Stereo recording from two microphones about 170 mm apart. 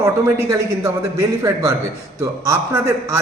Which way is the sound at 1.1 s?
20° right (ahead or behind).